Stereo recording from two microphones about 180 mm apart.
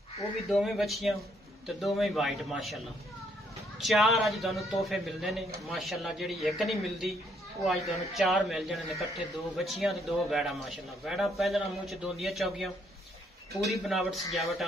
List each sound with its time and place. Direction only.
0.5 s speech: centre (ahead or behind)